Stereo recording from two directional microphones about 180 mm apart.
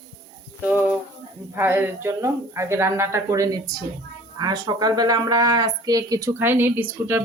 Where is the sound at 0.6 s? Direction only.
5° right (ahead or behind).